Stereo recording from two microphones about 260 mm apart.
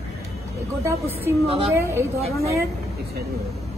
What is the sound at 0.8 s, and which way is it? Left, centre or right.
Speech, centre.